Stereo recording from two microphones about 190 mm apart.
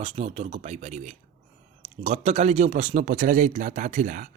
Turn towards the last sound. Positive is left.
turn(degrees=-45)  # may be behind; listen again after turning